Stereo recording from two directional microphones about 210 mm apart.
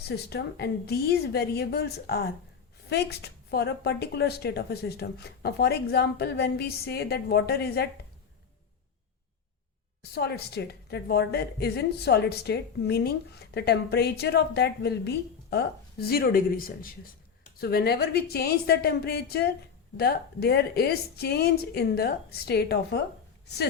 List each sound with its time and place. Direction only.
0.0 s a woman's voice: 50° left (ahead or behind)
10.2 s a woman's voice: 50° left (ahead or behind)